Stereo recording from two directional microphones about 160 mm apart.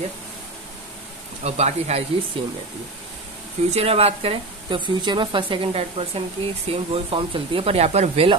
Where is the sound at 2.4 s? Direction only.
35° right (ahead or behind).